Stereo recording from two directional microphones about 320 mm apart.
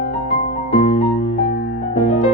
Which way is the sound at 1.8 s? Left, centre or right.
Left.